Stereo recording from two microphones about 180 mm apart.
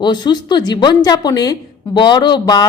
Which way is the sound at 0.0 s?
25° left (ahead or behind).